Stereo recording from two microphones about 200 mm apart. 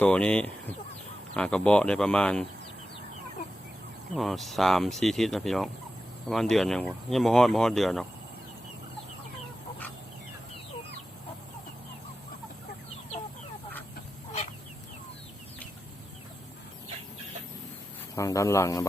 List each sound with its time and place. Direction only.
0.0 s speech: 5° left (ahead or behind)
4.1 s speech: centre (ahead or behind)
18.1 s speech: 15° left (ahead or behind)